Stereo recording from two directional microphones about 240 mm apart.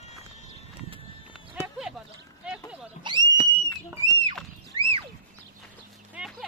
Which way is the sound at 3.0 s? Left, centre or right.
Centre.